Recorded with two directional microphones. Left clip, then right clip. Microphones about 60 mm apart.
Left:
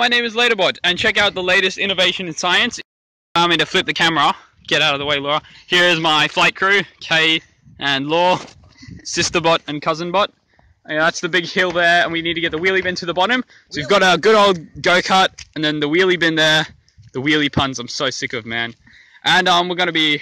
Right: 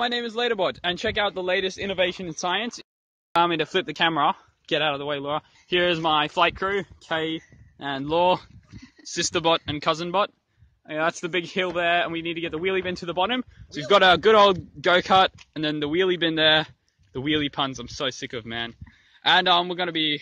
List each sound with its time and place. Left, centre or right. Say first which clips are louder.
0.0 s speech: left 10 dB; centre
1.8 s a man's voice: left 8 dB; right
2.2 s speech: left 10 dB; centre
9.0 s a man's voice: left 7 dB; centre
9.4 s a man's voice: left 4 dB; centre
12.7 s a man's voice: left 8 dB; right
13.1 s speech: left 7 dB; centre
14.8 s speech: left 4 dB; right
15.8 s a man's voice: left 8 dB; centre